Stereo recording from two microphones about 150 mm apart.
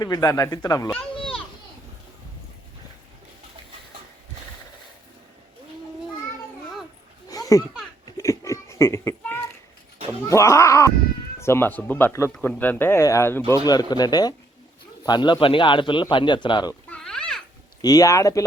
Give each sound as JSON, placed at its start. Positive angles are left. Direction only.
{"t": 0.0, "sound": "speech", "side_deg": 25}
{"t": 0.9, "sound": "children playing", "side_deg": 5}
{"t": 7.3, "sound": "children playing", "side_deg": 25}
{"t": 8.0, "sound": "a sound", "side_deg": 20}
{"t": 10.2, "sound": "a man's voice", "side_deg": 20}
{"t": 16.9, "sound": "a sound", "side_deg": 5}
{"t": 17.8, "sound": "speech", "side_deg": 25}